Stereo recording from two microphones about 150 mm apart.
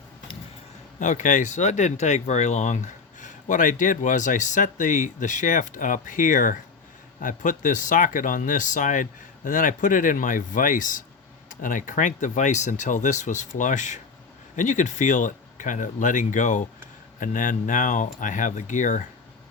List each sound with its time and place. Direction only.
0.9 s speech: 55° left (ahead or behind)